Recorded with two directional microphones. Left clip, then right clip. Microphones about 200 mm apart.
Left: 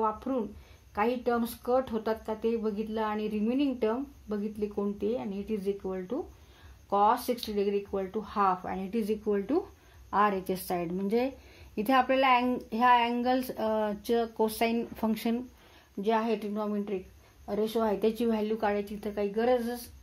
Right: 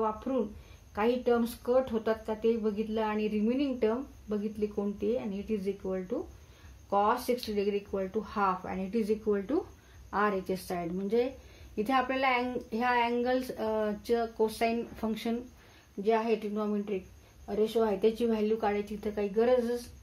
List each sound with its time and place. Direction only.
0.3 s a woman's voice: 30° left (ahead or behind)